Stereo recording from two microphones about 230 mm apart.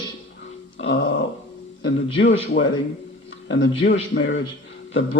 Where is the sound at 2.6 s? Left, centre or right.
Left.